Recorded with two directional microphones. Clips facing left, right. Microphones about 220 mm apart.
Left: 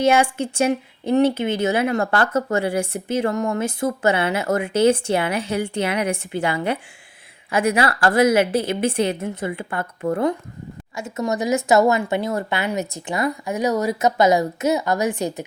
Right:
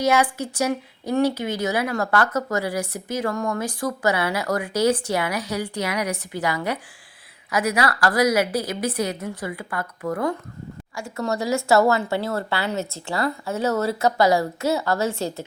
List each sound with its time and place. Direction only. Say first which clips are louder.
0.0 s speech: left 3 dB; 25° left (ahead or behind)